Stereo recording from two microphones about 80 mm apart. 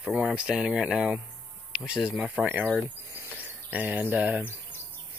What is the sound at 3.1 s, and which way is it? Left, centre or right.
Cricket, right.